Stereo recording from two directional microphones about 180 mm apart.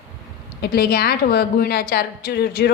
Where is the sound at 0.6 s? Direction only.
60° left (ahead or behind).